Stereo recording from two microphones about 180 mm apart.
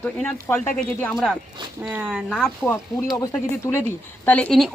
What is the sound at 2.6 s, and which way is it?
A woman's voice, 10° left (ahead or behind).